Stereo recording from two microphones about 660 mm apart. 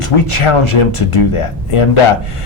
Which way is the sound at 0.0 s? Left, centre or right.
Left.